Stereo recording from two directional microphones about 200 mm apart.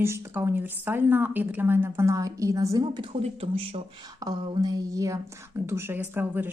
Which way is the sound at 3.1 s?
30° right (ahead or behind).